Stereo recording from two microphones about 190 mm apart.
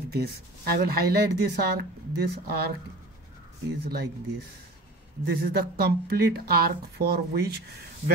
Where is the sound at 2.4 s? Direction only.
55° right (ahead or behind).